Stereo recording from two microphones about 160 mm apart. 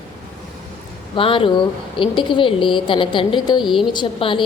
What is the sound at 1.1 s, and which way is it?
A woman's voice, 35° left (ahead or behind).